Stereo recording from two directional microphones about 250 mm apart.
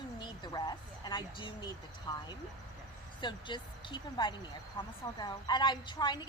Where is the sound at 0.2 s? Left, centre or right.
Centre.